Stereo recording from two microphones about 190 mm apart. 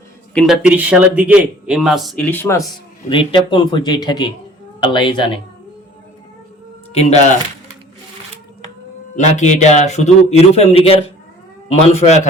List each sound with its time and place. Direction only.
0.3 s speech: centre (ahead or behind)
3.1 s speech: 25° left (ahead or behind)
6.9 s a man's voice: 35° left (ahead or behind)
9.1 s a man's voice: 40° left (ahead or behind)